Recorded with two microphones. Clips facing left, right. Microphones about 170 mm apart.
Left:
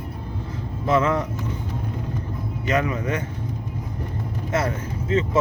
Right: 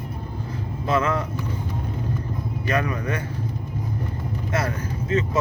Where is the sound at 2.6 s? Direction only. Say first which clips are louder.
Left 2 dB; 20° left (ahead or behind).